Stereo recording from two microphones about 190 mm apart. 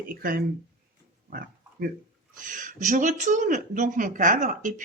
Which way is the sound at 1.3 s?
50° right (ahead or behind).